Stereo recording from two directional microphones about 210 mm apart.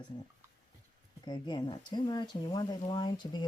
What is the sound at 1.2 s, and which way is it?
Speech, 20° left (ahead or behind).